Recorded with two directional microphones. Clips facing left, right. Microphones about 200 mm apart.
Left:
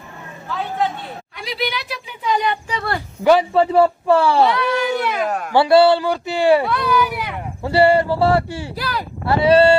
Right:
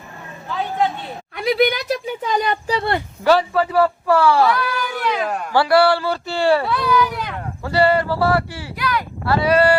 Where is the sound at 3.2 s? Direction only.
20° left (ahead or behind).